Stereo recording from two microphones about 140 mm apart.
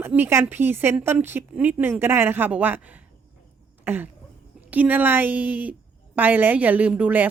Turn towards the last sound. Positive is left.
turn(degrees=-10)  # may be behind; listen again after turning